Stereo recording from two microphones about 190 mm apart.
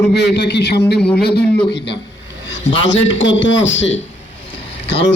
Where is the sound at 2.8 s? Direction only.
80° left.